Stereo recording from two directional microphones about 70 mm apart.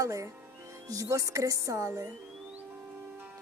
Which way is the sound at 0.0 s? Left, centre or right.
Right.